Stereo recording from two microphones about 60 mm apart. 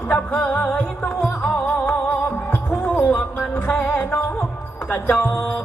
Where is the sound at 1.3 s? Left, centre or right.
Left.